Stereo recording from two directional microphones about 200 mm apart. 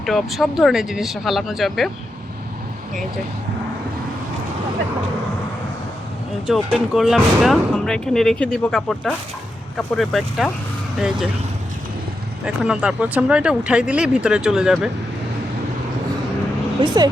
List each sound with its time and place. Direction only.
0.0 s speech: centre (ahead or behind)
6.5 s speech: centre (ahead or behind)
12.5 s speech: 5° right (ahead or behind)
16.8 s speech: 20° right (ahead or behind)